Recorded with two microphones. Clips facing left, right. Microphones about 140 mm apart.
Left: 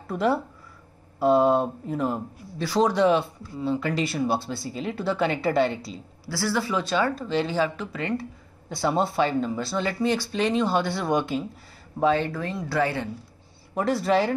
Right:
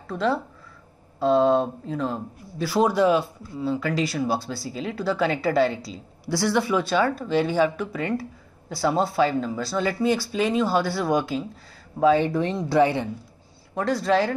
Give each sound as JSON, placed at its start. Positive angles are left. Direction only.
{"t": 0.0, "sound": "speech", "side_deg": 10}
{"t": 2.6, "sound": "speech", "side_deg": -5}
{"t": 6.2, "sound": "speech", "side_deg": -20}
{"t": 12.2, "sound": "speech", "side_deg": -20}
{"t": 13.7, "sound": "speech", "side_deg": 5}